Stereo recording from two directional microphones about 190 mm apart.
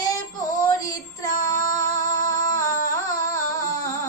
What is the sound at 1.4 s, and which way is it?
Child singing, 20° left (ahead or behind).